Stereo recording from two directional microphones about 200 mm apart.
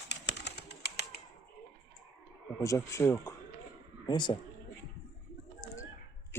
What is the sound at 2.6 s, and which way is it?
Speech, 15° left (ahead or behind).